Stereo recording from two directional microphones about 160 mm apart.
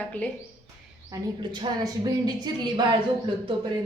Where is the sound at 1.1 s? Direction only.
30° right (ahead or behind).